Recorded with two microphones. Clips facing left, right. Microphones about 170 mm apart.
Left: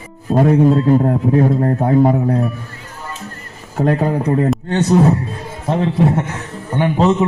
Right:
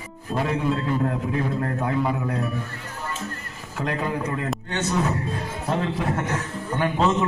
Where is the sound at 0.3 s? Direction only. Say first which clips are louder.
Left 12 dB; 45° left (ahead or behind).